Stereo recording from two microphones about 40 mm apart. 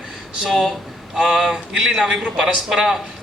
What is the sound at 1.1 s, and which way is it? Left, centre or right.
A man's voice, centre.